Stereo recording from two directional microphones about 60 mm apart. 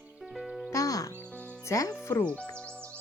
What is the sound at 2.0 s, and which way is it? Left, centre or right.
Music, left.